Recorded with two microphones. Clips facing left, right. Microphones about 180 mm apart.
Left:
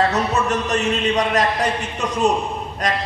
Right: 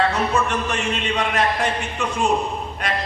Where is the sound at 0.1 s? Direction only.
40° left (ahead or behind).